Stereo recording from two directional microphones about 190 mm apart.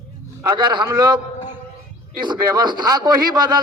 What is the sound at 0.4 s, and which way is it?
A man's voice, 25° right (ahead or behind).